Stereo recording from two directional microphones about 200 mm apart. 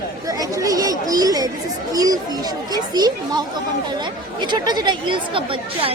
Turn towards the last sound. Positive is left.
turn(degrees=-25)  # may be behind; listen again after turning